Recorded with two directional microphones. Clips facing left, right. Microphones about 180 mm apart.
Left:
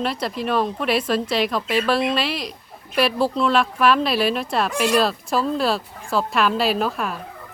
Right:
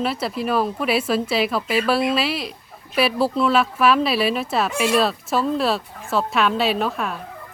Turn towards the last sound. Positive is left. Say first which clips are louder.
# even
turn(degrees=0)  # may be behind; listen again after turning